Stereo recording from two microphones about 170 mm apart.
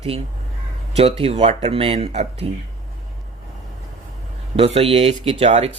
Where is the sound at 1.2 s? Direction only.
35° right (ahead or behind).